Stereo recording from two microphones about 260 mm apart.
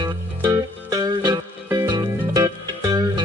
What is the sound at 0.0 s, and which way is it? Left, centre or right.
Music, centre.